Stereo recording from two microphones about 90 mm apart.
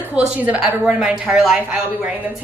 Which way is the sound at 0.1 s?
15° right (ahead or behind).